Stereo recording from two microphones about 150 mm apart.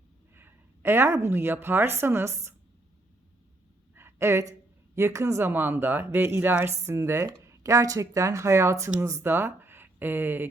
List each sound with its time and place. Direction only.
0.3 s a woman's voice: 15° right (ahead or behind)
3.9 s a sound: 15° right (ahead or behind)
4.9 s speech: 20° right (ahead or behind)